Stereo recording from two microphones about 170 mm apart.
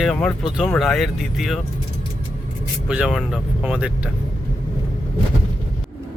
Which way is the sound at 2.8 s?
5° right (ahead or behind).